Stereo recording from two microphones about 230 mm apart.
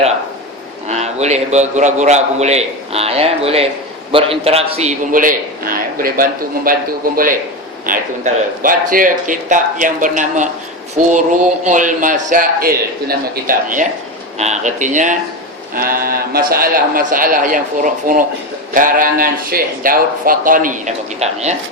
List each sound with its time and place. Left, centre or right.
0.9 s a man's voice: right
7.9 s speech: right